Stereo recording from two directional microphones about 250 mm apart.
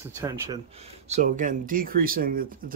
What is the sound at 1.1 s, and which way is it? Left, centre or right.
Speech, right.